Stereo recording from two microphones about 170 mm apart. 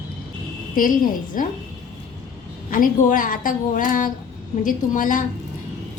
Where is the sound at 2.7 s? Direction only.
55° left (ahead or behind).